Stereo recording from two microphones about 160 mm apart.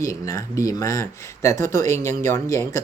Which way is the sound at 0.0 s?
20° left (ahead or behind).